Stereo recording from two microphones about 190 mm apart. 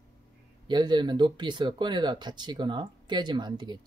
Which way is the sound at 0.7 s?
25° right (ahead or behind).